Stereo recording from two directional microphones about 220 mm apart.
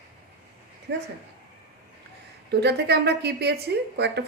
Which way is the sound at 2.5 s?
50° right (ahead or behind).